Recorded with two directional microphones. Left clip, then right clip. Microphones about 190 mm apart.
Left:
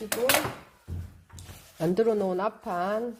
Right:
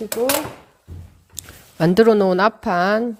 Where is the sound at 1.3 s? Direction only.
50° right (ahead or behind).